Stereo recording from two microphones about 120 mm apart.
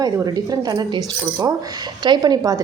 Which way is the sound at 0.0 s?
30° right (ahead or behind).